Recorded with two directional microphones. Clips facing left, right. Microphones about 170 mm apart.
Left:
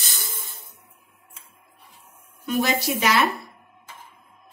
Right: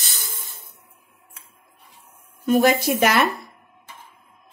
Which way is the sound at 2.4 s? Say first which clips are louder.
Right 6 dB; 50° right (ahead or behind).